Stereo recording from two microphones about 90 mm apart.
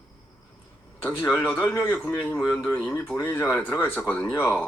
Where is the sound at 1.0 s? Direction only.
20° left (ahead or behind).